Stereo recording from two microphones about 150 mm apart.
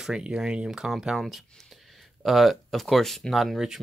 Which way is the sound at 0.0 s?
5° right (ahead or behind).